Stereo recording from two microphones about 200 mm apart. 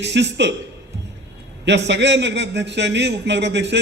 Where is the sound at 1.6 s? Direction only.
60° right (ahead or behind).